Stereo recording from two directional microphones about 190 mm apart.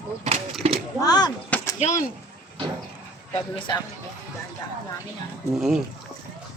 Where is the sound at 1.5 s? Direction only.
5° left (ahead or behind).